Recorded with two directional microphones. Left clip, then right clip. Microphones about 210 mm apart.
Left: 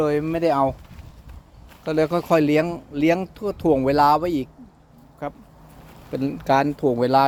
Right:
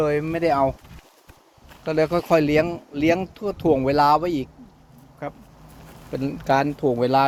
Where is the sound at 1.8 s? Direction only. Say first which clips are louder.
Even; 15° left (ahead or behind).